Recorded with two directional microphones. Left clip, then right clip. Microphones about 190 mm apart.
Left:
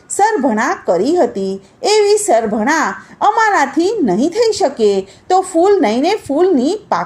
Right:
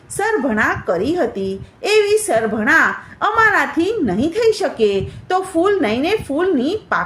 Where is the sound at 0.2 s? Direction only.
30° left (ahead or behind).